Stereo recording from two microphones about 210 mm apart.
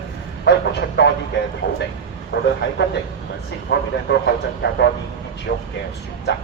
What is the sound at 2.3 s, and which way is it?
A man's voice, 55° left (ahead or behind).